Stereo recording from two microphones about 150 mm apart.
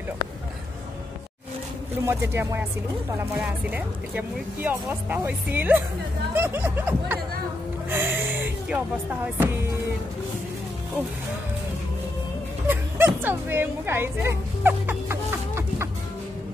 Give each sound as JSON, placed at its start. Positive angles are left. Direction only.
{"t": 2.0, "sound": "speech", "side_deg": -15}
{"t": 12.6, "sound": "speech", "side_deg": -15}